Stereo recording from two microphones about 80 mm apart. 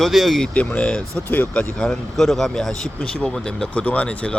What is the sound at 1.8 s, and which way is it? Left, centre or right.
Speech, centre.